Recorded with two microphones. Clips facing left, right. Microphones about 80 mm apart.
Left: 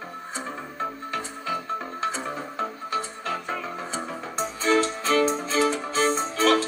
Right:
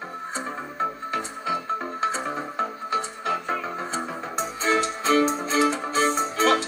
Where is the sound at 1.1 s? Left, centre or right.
Right.